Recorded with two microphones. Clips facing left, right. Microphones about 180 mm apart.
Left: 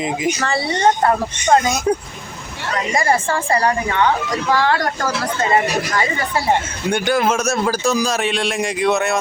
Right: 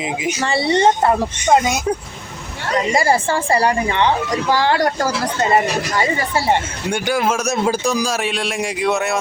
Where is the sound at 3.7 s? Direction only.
25° right (ahead or behind).